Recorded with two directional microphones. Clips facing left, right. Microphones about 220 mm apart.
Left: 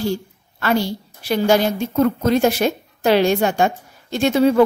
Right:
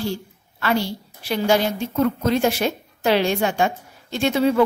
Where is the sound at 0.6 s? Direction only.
45° left (ahead or behind).